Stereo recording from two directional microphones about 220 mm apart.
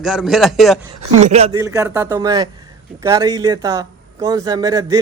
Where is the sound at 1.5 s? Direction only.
15° right (ahead or behind).